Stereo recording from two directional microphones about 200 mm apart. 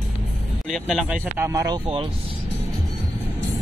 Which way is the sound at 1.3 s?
15° right (ahead or behind).